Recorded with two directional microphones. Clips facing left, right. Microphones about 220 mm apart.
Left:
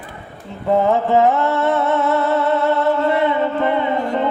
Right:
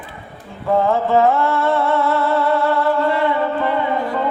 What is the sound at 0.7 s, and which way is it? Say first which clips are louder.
Music: left 1 dB; 20° left (ahead or behind).